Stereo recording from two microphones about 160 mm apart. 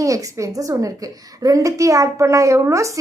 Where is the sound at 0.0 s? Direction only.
20° right (ahead or behind).